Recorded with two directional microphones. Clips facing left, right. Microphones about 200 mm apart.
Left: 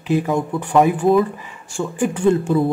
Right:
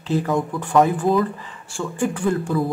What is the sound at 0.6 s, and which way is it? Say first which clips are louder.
Speech: left 2 dB; 15° left (ahead or behind).